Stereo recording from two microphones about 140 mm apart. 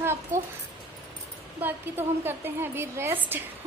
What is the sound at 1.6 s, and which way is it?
A woman's voice, 15° right (ahead or behind).